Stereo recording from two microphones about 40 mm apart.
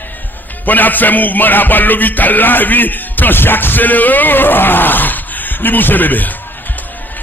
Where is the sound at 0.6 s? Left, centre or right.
Left.